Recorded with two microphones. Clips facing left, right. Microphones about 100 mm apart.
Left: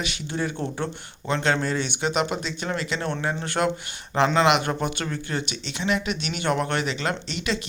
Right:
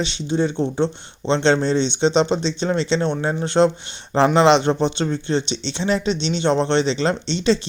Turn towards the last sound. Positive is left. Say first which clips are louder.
# right 8 dB
turn(degrees=-30)  # may be behind; listen again after turning